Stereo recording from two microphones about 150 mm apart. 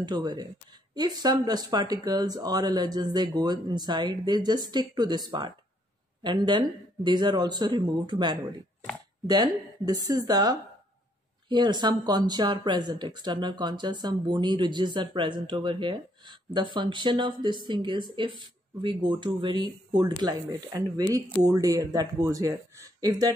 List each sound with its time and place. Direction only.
0.0 s speech: 30° right (ahead or behind)